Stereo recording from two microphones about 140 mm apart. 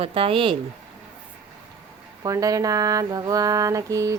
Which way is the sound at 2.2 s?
25° right (ahead or behind).